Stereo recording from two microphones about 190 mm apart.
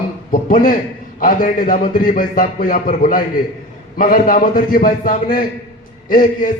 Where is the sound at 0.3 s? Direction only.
45° left (ahead or behind).